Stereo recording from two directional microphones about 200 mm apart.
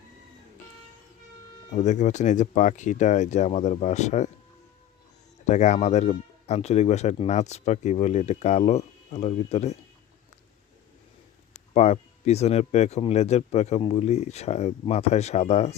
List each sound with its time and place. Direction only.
1.7 s speech: 35° left (ahead or behind)
5.5 s speech: 35° left (ahead or behind)
11.7 s speech: 35° left (ahead or behind)